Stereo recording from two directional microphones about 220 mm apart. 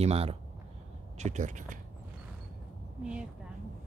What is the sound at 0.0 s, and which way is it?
Speech, 25° right (ahead or behind).